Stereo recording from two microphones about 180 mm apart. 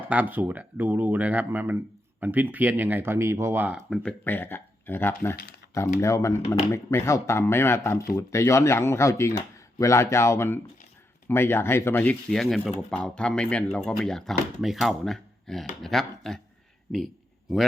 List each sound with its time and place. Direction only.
0.1 s a man's voice: 10° right (ahead or behind)